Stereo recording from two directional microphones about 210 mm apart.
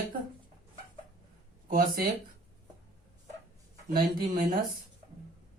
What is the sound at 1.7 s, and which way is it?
Speech, 45° right (ahead or behind).